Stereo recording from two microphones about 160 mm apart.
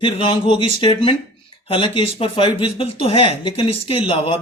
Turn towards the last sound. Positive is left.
turn(degrees=40)  # may be behind; listen again after turning